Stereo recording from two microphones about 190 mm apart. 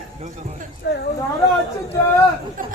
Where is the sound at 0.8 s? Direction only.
60° left (ahead or behind).